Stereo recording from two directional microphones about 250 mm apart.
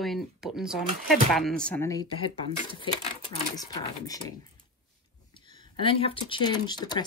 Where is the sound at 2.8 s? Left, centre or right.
Left.